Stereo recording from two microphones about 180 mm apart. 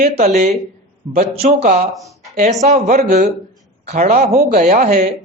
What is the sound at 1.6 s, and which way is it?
Speech, 55° right (ahead or behind).